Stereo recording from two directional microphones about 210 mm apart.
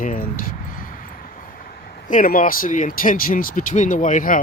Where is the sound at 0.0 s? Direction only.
40° left (ahead or behind).